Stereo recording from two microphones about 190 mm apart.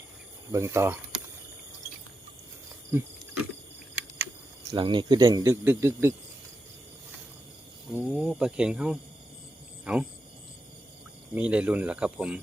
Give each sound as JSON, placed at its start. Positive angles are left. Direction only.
{"t": 0.5, "sound": "speech", "side_deg": -15}
{"t": 2.9, "sound": "speech", "side_deg": -15}
{"t": 4.7, "sound": "speech", "side_deg": -25}
{"t": 7.9, "sound": "speech", "side_deg": -5}
{"t": 11.3, "sound": "speech", "side_deg": -5}